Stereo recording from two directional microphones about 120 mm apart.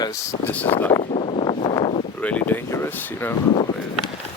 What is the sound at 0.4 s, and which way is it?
Speech, 15° left (ahead or behind).